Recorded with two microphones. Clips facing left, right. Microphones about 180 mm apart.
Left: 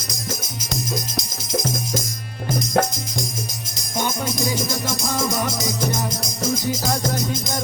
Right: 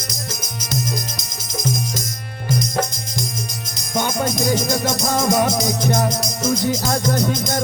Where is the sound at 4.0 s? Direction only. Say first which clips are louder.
Right 3 dB; 60° right (ahead or behind).